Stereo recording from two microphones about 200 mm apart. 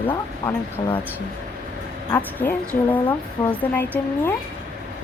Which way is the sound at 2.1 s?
15° left (ahead or behind).